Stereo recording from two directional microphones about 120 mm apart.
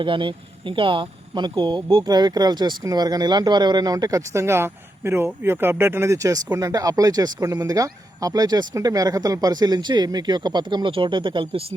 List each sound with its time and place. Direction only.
0.0 s speech: 45° right (ahead or behind)